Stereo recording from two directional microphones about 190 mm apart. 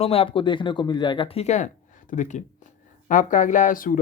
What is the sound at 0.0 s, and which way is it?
Speech, 30° left (ahead or behind).